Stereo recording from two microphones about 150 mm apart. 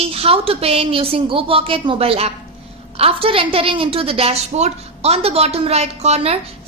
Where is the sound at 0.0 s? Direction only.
40° right (ahead or behind).